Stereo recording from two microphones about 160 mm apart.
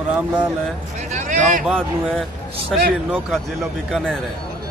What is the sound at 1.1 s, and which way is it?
Speech, 55° right (ahead or behind).